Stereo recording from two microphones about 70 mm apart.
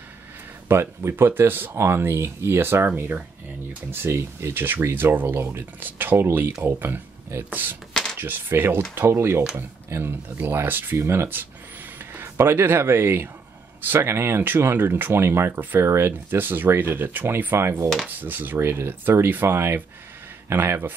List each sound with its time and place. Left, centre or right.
0.7 s speech: right
3.9 s speech: right
7.9 s a sound: centre
8.2 s speech: right
16.1 s speech: right
18.2 s speech: right